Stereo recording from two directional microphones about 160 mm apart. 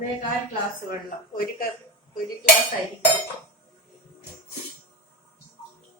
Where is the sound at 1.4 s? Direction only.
65° left (ahead or behind).